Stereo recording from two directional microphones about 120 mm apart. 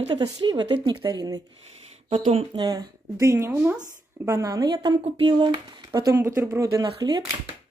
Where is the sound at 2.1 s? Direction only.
55° right (ahead or behind).